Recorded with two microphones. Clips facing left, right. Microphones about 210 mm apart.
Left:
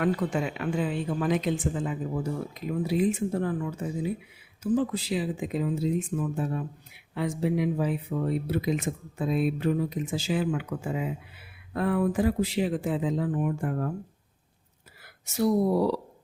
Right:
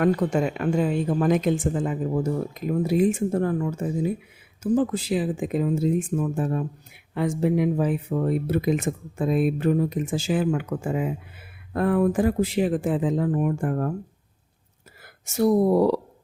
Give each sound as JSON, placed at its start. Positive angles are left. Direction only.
{"t": 0.0, "sound": "speech", "side_deg": -45}
{"t": 15.3, "sound": "speech", "side_deg": -50}